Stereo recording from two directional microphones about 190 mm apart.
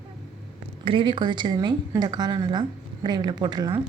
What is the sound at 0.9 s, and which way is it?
A woman's voice, 25° right (ahead or behind).